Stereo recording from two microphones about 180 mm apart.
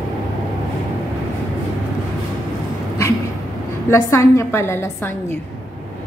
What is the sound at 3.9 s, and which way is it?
A woman's voice, 15° left (ahead or behind).